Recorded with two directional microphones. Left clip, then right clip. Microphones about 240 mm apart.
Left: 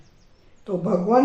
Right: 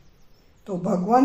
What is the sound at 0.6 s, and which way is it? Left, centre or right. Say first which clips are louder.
Speech: left 3 dB; right.